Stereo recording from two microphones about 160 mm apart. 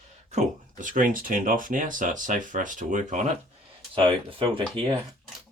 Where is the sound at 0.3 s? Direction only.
50° right (ahead or behind).